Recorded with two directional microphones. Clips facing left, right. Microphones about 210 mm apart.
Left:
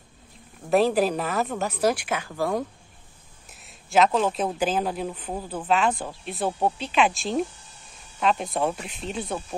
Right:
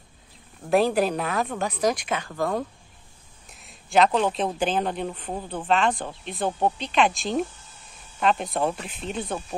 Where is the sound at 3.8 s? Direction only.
Centre (ahead or behind).